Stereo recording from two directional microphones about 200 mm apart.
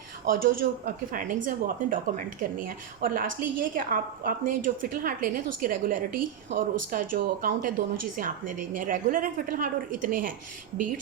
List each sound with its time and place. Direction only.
0.3 s a woman's voice: 45° right (ahead or behind)